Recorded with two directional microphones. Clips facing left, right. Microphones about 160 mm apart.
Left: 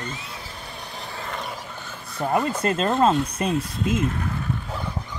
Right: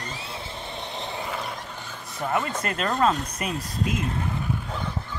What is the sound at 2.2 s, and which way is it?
Speech, 25° left (ahead or behind).